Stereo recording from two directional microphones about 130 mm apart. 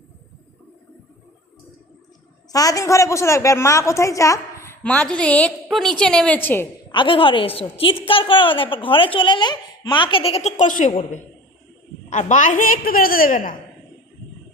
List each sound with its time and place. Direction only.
2.5 s a woman's voice: 30° left (ahead or behind)
4.8 s a woman's voice: 10° left (ahead or behind)
6.9 s a woman's voice: 40° left (ahead or behind); by 13.6 s 90° left